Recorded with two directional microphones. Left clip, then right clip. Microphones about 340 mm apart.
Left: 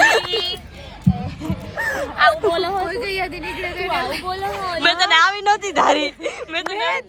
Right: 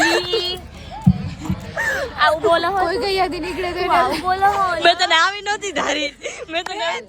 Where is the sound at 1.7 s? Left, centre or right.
Right.